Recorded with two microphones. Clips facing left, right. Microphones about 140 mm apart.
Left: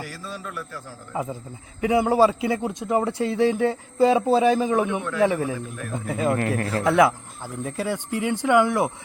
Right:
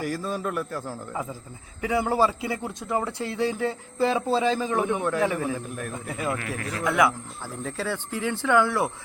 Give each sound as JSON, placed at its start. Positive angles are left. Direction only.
{"t": 0.0, "sound": "a man's voice", "side_deg": -45}
{"t": 1.1, "sound": "speech", "side_deg": 25}
{"t": 6.3, "sound": "a man's voice", "side_deg": 45}
{"t": 6.7, "sound": "a man's voice", "side_deg": 30}
{"t": 7.4, "sound": "speech", "side_deg": 15}